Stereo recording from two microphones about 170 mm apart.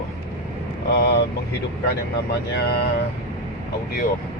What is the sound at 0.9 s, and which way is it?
Speech, 75° left (ahead or behind).